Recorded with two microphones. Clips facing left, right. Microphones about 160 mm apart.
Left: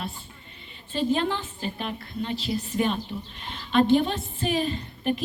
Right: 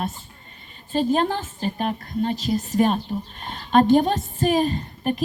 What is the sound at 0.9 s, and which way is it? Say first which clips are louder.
A woman's voice: right 4 dB; 45° right (ahead or behind).